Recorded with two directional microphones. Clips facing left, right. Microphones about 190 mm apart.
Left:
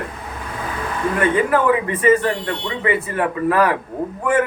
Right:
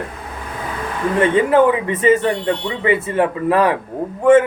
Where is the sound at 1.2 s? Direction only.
25° right (ahead or behind).